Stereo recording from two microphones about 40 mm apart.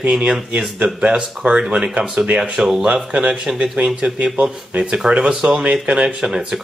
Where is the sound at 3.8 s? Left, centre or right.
Right.